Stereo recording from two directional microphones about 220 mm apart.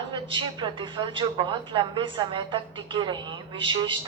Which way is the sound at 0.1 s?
20° right (ahead or behind).